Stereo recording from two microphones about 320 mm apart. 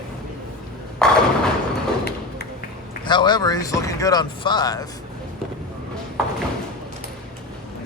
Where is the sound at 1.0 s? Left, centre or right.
Centre.